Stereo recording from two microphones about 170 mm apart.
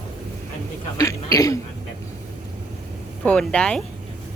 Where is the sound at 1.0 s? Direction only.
20° left (ahead or behind).